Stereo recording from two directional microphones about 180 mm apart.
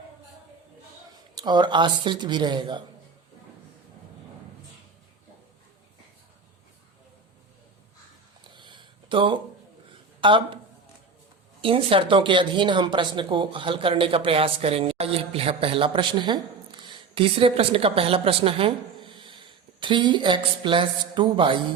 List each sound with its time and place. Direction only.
1.4 s speech: 25° right (ahead or behind)
8.4 s a sound: 25° right (ahead or behind)
10.2 s speech: 30° right (ahead or behind)
11.6 s speech: 30° right (ahead or behind)